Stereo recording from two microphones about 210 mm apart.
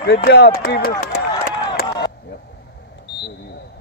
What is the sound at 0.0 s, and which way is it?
Speech, 50° left (ahead or behind).